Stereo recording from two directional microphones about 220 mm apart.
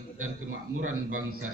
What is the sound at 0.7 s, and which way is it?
Speech, 75° right (ahead or behind).